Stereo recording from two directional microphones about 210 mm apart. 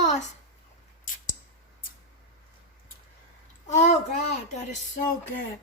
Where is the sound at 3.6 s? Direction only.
35° left (ahead or behind).